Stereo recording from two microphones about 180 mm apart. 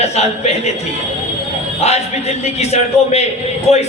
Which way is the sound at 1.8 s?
35° left (ahead or behind).